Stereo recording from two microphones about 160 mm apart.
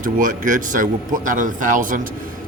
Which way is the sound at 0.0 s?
55° right (ahead or behind).